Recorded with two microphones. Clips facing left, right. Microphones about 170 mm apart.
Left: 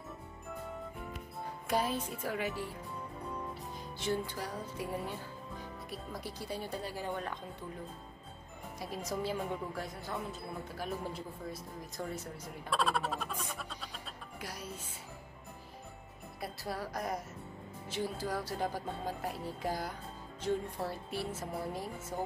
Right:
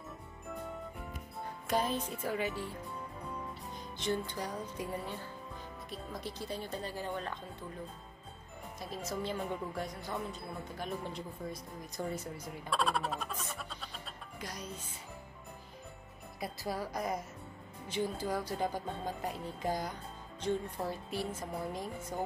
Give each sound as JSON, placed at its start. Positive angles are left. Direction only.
{"t": 1.7, "sound": "speech", "side_deg": 10}
{"t": 4.0, "sound": "speech", "side_deg": 10}
{"t": 8.7, "sound": "speech", "side_deg": 10}
{"t": 13.6, "sound": "music", "side_deg": 0}
{"t": 14.4, "sound": "speech", "side_deg": 5}
{"t": 16.3, "sound": "speech", "side_deg": 0}
{"t": 21.1, "sound": "speech", "side_deg": 5}